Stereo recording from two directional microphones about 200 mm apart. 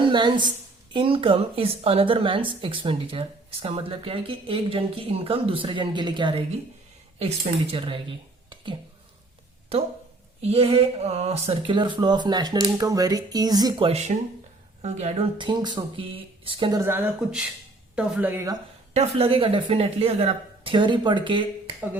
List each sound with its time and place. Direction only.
0.0 s a woman's voice: 25° right (ahead or behind)
9.7 s a woman's voice: 30° right (ahead or behind)
16.8 s speech: 10° right (ahead or behind)
18.9 s a woman's voice: 30° right (ahead or behind)